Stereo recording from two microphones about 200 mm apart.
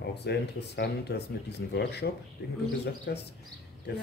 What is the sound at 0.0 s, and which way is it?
Speech, 55° left (ahead or behind).